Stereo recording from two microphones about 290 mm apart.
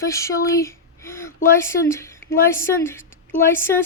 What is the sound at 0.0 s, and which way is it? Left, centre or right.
Speech, centre.